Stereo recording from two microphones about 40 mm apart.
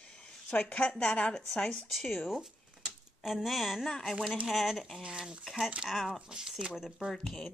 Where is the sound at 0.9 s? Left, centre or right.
Left.